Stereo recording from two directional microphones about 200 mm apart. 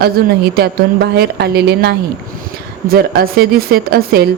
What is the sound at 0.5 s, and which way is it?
A woman's voice, 55° right (ahead or behind).